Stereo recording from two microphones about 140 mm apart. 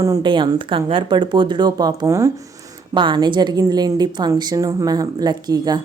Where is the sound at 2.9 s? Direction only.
35° right (ahead or behind).